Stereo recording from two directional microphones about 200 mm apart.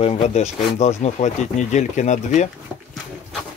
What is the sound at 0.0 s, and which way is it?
Speech, 30° left (ahead or behind).